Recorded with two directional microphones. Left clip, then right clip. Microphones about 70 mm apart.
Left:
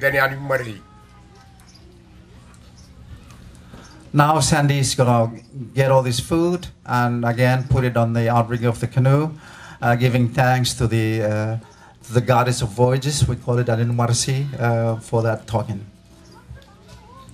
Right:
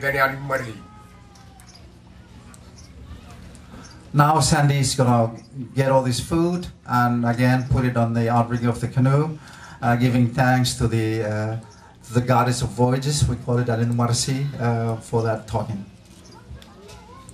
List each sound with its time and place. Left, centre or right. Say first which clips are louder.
0.0 s speech: left 2 dB; left
4.1 s speech: left 1 dB; left